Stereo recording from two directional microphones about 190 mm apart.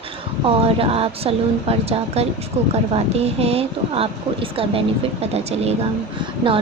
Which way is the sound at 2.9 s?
35° right (ahead or behind).